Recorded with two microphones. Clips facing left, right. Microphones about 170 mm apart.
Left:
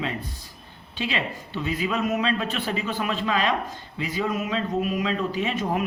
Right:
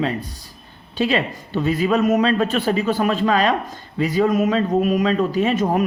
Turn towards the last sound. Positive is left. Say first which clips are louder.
# right 7 dB
turn(degrees=-45)  # may be behind; listen again after turning